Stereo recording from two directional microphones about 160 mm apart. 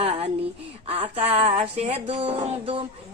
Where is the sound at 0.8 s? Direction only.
35° right (ahead or behind).